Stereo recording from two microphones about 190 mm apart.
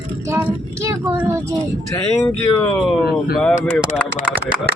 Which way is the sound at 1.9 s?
15° left (ahead or behind).